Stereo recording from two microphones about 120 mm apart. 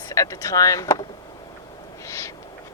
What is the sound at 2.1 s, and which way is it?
Owl, 25° left (ahead or behind).